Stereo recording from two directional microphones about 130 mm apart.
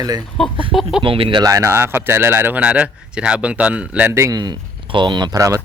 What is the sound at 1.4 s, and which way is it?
Speech, 25° right (ahead or behind).